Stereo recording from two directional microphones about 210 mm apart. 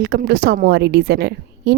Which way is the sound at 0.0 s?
50° right (ahead or behind).